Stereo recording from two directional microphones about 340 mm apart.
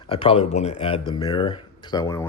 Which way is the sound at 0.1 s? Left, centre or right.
Centre.